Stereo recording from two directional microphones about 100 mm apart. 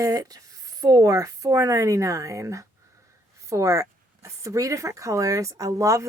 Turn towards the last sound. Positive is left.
turn(degrees=-35)  # may be behind; listen again after turning